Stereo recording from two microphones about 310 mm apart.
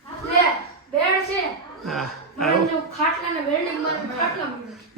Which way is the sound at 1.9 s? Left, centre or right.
Centre.